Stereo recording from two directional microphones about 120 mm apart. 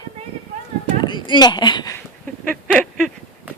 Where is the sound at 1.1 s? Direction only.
40° left (ahead or behind).